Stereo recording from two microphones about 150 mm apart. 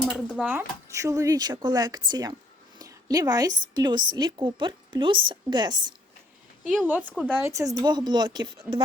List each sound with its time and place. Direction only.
0.0 s a sound: 10° left (ahead or behind)
0.4 s a woman's voice: 15° right (ahead or behind)
6.8 s a woman's voice: 10° right (ahead or behind)
7.1 s speech: 5° left (ahead or behind)
7.3 s speech: 20° right (ahead or behind)
7.8 s speech: 30° right (ahead or behind)